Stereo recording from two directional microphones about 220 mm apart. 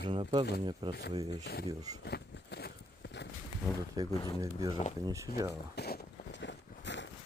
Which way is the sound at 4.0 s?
15° right (ahead or behind).